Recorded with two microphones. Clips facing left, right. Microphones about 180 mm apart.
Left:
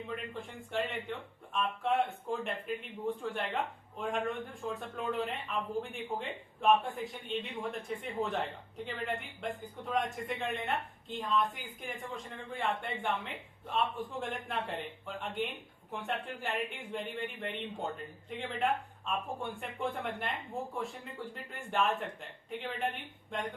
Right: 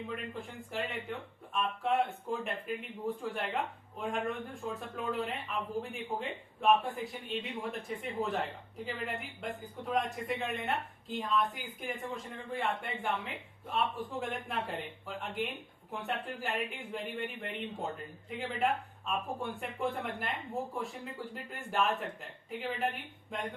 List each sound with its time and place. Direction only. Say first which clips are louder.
0.3 s a man's voice: left 2 dB; centre (ahead or behind)